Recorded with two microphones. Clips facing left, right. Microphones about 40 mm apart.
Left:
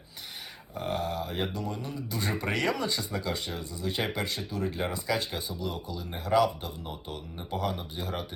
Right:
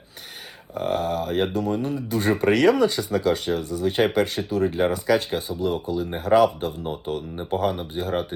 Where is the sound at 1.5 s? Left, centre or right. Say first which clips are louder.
Right 10 dB; right.